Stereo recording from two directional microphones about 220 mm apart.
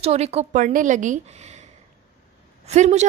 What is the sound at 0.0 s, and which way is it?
A woman's voice, 30° right (ahead or behind).